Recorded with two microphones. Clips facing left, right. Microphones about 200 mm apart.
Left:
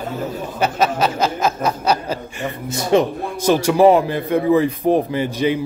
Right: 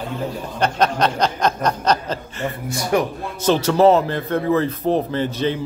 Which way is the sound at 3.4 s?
10° left (ahead or behind).